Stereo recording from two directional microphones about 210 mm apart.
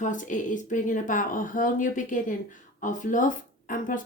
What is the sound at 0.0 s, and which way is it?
Speech, 35° left (ahead or behind).